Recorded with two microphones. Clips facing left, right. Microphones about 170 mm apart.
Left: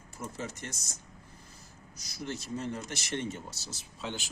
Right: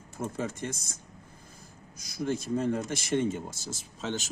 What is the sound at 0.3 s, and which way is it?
Speech, 55° right (ahead or behind).